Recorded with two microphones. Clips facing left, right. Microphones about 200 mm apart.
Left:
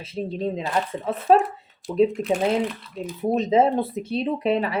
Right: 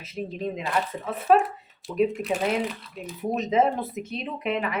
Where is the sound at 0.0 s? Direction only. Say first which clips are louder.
Left 4 dB; 30° left (ahead or behind).